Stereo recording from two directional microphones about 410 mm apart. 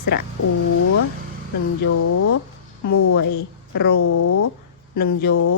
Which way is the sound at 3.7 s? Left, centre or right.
Left.